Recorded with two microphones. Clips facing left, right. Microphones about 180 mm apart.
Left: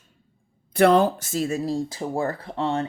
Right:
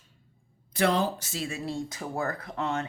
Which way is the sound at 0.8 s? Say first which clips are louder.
Left 8 dB; 55° left (ahead or behind).